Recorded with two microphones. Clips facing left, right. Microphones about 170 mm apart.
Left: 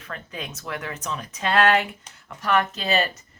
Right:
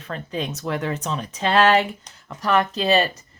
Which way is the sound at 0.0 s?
30° right (ahead or behind).